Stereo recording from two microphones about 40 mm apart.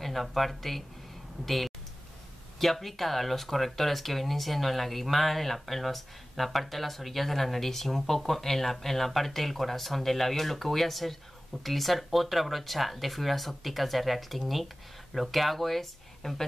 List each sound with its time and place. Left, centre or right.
0.0 s speech: centre